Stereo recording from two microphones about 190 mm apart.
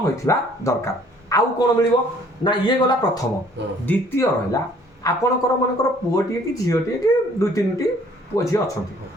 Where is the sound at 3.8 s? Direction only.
10° left (ahead or behind).